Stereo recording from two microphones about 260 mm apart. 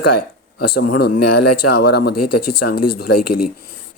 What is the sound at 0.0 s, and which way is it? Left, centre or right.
Speech, left.